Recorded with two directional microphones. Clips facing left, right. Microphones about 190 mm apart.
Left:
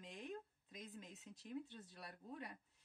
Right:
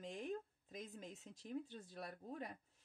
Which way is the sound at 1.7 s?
45° right (ahead or behind).